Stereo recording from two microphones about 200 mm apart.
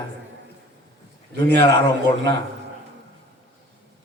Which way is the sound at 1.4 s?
60° right (ahead or behind).